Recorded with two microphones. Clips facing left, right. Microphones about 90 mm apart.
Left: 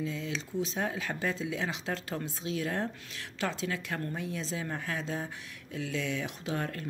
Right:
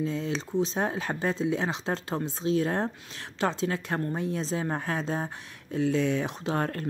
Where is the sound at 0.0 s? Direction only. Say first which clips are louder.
Right 6 dB; 40° right (ahead or behind).